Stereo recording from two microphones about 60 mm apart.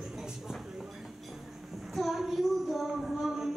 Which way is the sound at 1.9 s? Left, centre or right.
Centre.